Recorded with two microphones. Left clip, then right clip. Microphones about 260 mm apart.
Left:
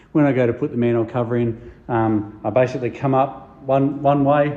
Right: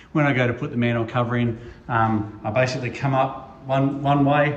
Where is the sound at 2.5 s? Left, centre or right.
Left.